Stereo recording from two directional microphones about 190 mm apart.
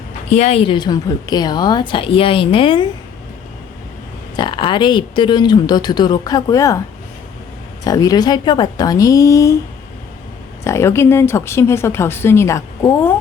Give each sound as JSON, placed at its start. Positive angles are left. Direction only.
{"t": 0.3, "sound": "a woman's voice", "side_deg": 35}
{"t": 4.4, "sound": "a woman's voice", "side_deg": 25}
{"t": 7.9, "sound": "a woman's voice", "side_deg": 20}
{"t": 10.6, "sound": "speech", "side_deg": 15}